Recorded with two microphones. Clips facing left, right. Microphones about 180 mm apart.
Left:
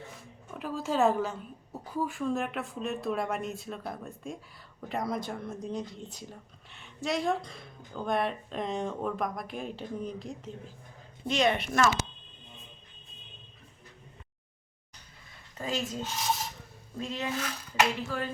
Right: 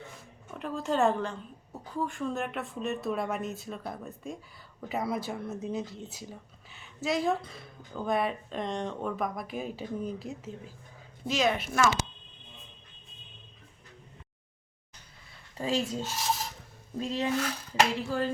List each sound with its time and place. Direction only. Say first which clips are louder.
0.5 s speech: right 1 dB; centre (ahead or behind)
15.5 s speech: right 3 dB; 30° right (ahead or behind)
16.0 s filing: even; 10° right (ahead or behind)
17.0 s a sound: right 4 dB; 30° right (ahead or behind)